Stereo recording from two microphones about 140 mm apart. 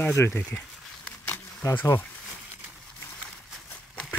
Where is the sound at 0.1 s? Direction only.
15° left (ahead or behind).